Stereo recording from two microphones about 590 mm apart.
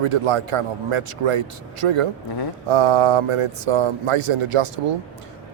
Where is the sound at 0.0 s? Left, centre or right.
Right.